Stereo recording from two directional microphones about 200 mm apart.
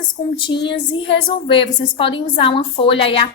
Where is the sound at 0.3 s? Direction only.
25° left (ahead or behind).